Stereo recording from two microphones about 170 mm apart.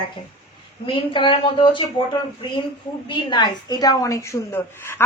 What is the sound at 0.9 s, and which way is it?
Speech, 30° left (ahead or behind).